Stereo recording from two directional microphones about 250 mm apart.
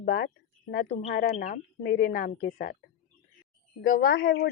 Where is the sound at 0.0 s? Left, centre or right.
Left.